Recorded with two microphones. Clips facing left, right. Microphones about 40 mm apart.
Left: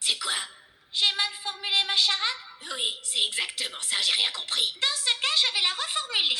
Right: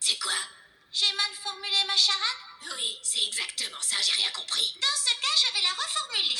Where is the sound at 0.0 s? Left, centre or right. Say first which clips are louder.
Left 1 dB; left.